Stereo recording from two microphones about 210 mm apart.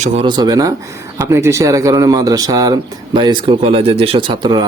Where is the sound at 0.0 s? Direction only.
25° right (ahead or behind).